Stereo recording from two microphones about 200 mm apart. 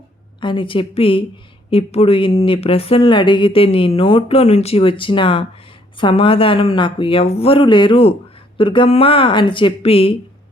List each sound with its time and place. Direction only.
0.3 s speech: 25° left (ahead or behind)